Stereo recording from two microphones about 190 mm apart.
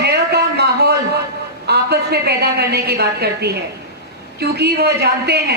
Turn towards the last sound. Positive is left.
turn(degrees=-55)  # may be behind; listen again after turning